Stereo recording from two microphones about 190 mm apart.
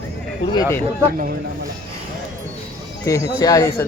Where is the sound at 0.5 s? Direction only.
20° left (ahead or behind).